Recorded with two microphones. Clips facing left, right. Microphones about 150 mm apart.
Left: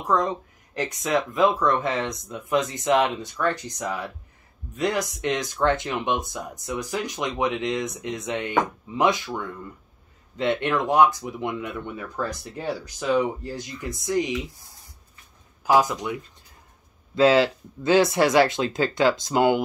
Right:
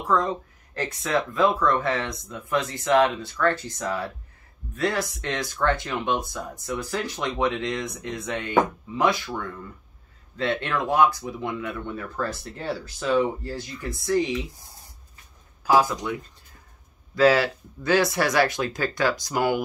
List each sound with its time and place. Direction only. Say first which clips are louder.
0.0 s speech: even; 20° left (ahead or behind)
15.6 s speech: even; 20° left (ahead or behind)